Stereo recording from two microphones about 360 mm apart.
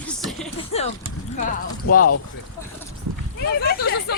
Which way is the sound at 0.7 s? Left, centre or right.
Centre.